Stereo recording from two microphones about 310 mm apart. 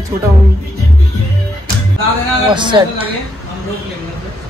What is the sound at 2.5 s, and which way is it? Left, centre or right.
Speech, centre.